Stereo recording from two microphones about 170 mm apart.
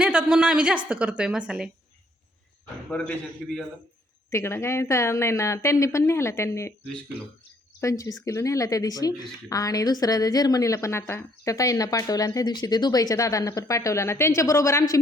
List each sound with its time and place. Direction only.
0.0 s a woman's voice: 5° right (ahead or behind)
3.4 s a woman's voice: centre (ahead or behind)
4.3 s a woman's voice: 15° left (ahead or behind)
7.8 s speech: 20° left (ahead or behind)